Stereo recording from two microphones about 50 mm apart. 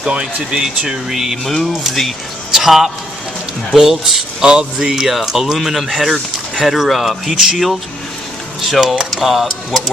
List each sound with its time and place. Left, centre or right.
0.0 s speech: right; by 1.4 s centre
1.5 s speech: centre
9.0 s speech: centre